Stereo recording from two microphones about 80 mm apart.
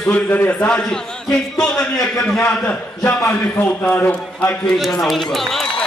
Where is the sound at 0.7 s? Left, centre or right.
Centre.